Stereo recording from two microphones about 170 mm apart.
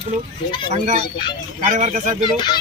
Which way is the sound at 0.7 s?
45° right (ahead or behind).